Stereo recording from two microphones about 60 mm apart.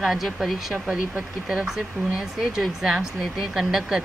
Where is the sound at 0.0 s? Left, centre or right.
Centre.